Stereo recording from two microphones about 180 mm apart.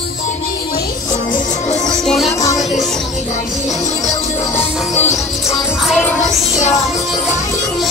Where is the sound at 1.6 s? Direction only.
40° left (ahead or behind).